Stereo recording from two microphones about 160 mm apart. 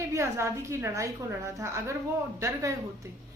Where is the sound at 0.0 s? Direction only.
15° right (ahead or behind).